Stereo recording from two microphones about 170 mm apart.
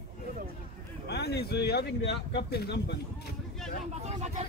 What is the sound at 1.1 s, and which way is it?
Speech, 75° left (ahead or behind).